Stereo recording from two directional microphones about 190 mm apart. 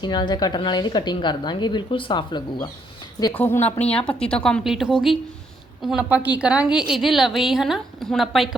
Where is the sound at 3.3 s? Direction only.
10° left (ahead or behind).